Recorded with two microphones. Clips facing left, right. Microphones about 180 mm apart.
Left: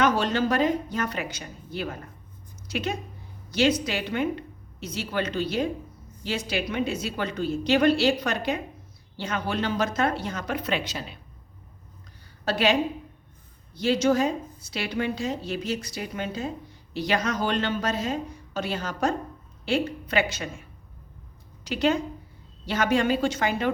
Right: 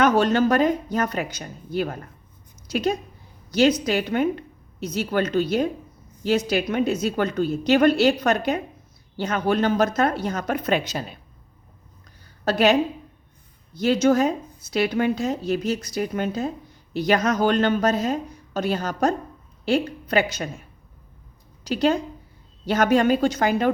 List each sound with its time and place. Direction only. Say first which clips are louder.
0.0 s a woman's voice: right 5 dB; 45° right (ahead or behind)
12.5 s a woman's voice: right 5 dB; 45° right (ahead or behind)
13.7 s a woman's voice: right 4 dB; 45° right (ahead or behind)
21.6 s a woman's voice: right 3 dB; 35° right (ahead or behind)